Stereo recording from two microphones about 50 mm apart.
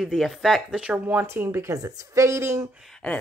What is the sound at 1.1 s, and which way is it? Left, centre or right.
Speech, right.